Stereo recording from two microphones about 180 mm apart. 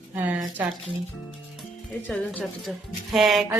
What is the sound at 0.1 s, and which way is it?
Speech, 10° right (ahead or behind).